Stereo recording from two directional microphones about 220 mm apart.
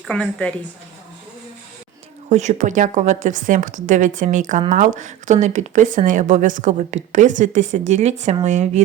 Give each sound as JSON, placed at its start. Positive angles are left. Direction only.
{"t": 0.1, "sound": "a woman's voice", "side_deg": 5}
{"t": 2.3, "sound": "speech", "side_deg": -30}